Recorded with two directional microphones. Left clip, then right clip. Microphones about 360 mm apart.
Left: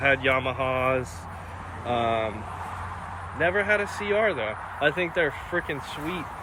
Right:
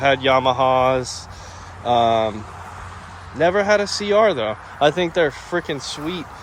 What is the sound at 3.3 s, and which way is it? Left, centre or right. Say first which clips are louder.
Speech: right 7 dB; right.